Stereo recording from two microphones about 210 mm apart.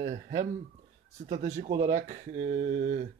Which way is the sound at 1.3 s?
35° right (ahead or behind).